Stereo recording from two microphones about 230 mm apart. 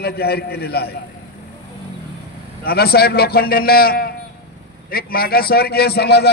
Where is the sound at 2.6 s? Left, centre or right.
Left.